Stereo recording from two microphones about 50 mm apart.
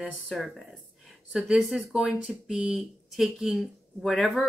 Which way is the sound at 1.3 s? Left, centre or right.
Centre.